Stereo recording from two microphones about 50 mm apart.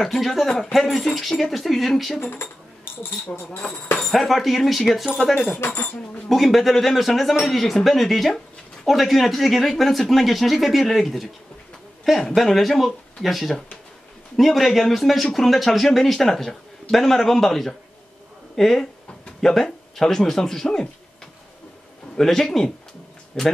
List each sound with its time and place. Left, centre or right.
0.0 s a man's voice: centre
2.1 s speech: left
4.1 s a man's voice: centre
12.4 s a man's voice: centre
22.1 s speech: centre